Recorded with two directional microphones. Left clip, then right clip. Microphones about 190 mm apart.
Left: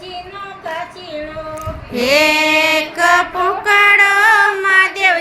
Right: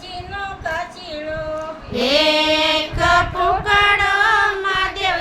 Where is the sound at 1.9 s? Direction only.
15° left (ahead or behind).